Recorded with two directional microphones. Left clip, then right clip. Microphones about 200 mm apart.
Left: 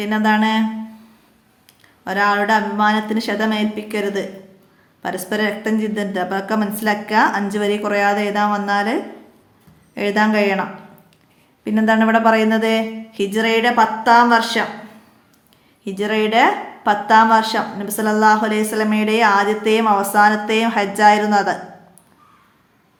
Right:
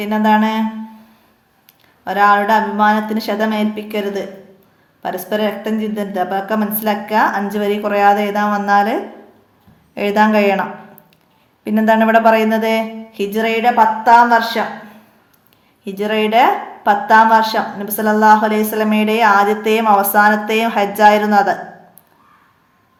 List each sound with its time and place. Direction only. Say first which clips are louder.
0.0 s a woman's voice: right 3 dB; 5° left (ahead or behind)
2.0 s a woman's voice: right 4 dB; 5° left (ahead or behind)
15.8 s a woman's voice: right 2 dB; 5° left (ahead or behind)